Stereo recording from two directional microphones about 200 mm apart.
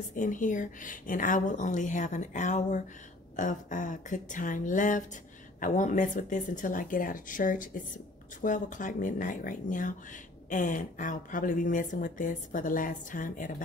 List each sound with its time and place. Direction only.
0.1 s speech: 40° left (ahead or behind)